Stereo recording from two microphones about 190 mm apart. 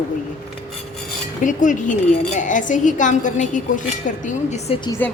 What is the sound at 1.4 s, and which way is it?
A woman's voice, 40° left (ahead or behind).